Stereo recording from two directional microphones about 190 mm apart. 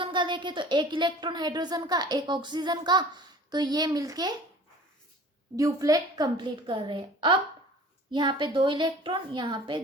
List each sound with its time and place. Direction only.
0.0 s speech: 25° right (ahead or behind)
5.5 s speech: 20° right (ahead or behind)